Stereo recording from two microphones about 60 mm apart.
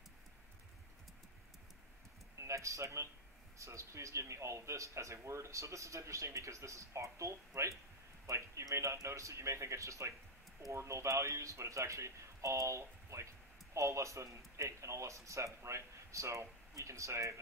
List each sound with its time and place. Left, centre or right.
2.3 s speech: right